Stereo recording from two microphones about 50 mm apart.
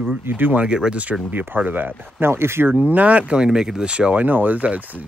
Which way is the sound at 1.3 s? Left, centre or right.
Right.